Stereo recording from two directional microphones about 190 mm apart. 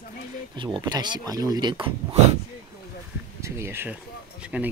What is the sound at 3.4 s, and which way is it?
Speech, 15° right (ahead or behind).